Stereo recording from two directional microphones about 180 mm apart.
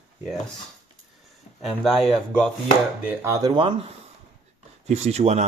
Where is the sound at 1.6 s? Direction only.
Centre (ahead or behind).